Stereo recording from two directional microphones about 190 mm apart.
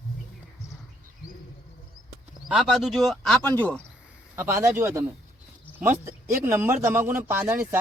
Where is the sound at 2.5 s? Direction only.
Centre (ahead or behind).